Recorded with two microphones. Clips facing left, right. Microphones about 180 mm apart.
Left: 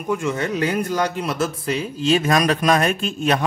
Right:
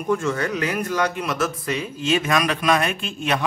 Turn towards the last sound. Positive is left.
turn(degrees=40)  # may be behind; listen again after turning